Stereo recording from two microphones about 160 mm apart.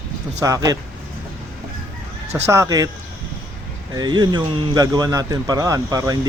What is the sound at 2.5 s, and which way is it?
Speech, 20° right (ahead or behind).